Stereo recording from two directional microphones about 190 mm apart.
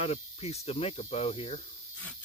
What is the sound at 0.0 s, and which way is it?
Speech, 35° left (ahead or behind).